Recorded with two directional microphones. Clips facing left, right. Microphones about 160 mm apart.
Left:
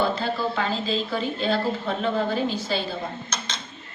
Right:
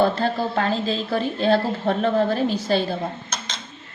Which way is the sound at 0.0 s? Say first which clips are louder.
Right 4 dB; 50° right (ahead or behind).